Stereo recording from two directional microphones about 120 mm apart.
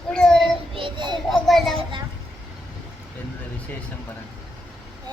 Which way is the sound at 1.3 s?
Centre (ahead or behind).